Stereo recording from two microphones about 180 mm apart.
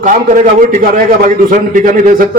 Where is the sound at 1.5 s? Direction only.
45° right (ahead or behind).